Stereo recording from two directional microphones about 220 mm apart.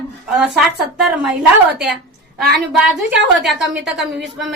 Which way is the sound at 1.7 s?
5° right (ahead or behind).